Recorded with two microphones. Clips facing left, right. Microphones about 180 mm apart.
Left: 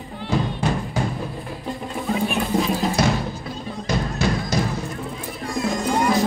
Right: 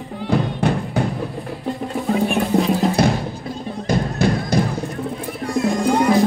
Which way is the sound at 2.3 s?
60° right (ahead or behind).